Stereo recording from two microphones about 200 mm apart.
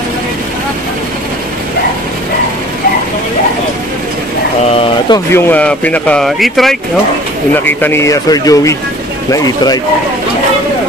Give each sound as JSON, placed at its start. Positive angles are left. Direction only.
{"t": 5.1, "sound": "speech", "side_deg": 10}